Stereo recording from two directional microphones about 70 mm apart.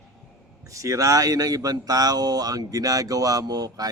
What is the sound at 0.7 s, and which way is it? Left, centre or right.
Speech, right.